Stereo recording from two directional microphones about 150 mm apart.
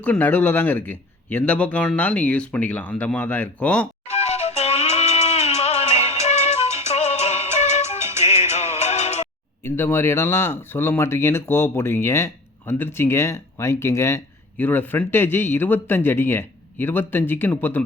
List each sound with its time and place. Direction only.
0.0 s speech: 10° left (ahead or behind)
4.1 s music: 45° left (ahead or behind)
7.9 s music: 15° right (ahead or behind)
8.2 s music: 50° left (ahead or behind)
9.6 s speech: 15° left (ahead or behind)